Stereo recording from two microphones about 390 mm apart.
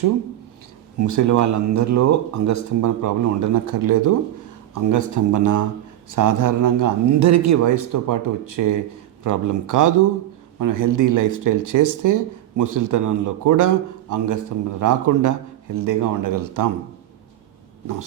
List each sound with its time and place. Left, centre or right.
0.9 s speech: right